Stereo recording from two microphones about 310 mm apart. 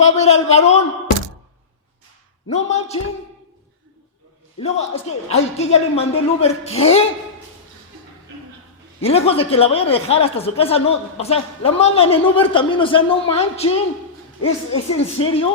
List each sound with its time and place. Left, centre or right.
0.0 s speech: left
2.5 s speech: left
4.6 s speech: centre
9.0 s speech: centre
14.9 s speech: centre